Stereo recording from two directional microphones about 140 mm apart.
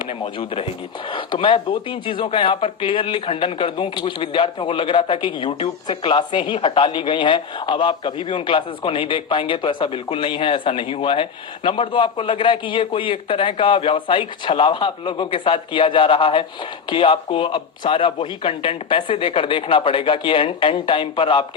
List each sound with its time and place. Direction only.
0.1 s speech: 40° left (ahead or behind)